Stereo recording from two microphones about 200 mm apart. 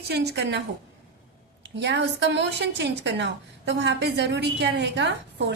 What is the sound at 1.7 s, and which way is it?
A woman's voice, 60° right (ahead or behind).